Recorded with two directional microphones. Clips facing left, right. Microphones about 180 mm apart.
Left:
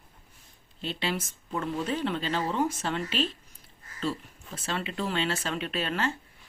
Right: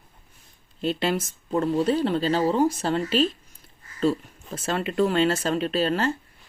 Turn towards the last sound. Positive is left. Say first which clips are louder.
# right 7 dB
turn(degrees=-35)  # may be behind; listen again after turning